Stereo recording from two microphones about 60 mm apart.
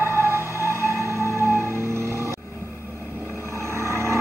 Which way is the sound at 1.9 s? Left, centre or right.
Right.